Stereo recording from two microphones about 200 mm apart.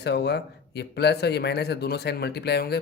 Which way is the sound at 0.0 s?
55° left (ahead or behind).